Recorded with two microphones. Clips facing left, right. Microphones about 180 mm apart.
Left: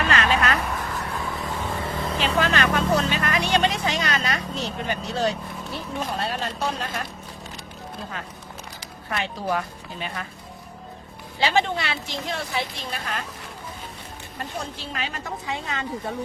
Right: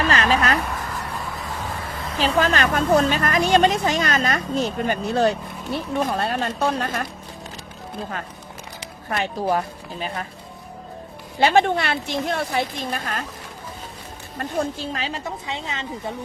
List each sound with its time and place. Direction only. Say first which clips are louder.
0.1 s a sound: right 2 dB; 35° right (ahead or behind)
0.7 s a sound: even; centre (ahead or behind)
2.1 s a woman's voice: right 4 dB; 35° right (ahead or behind); by 7.0 s 55° right (ahead or behind)
9.0 s a woman's voice: right 4 dB; 45° right (ahead or behind)
11.3 s a woman's voice: right 5 dB; 55° right (ahead or behind)
14.9 s speech: right 3 dB; 35° right (ahead or behind)
15.2 s a woman's voice: right 1 dB; 20° right (ahead or behind)